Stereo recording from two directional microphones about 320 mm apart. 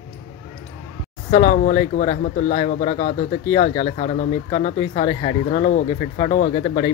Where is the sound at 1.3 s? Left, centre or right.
Left.